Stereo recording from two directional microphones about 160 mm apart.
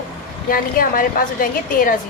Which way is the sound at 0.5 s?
60° left (ahead or behind).